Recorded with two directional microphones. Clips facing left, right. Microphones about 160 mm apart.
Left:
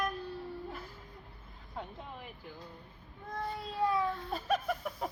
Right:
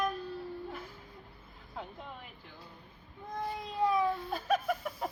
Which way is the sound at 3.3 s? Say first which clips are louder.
Right 1 dB; 15° right (ahead or behind).